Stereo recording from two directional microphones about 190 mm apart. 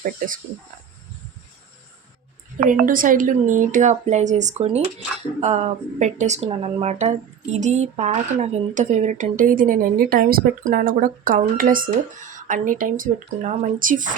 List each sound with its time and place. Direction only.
0.0 s speech: 45° right (ahead or behind)
2.6 s speech: 45° right (ahead or behind)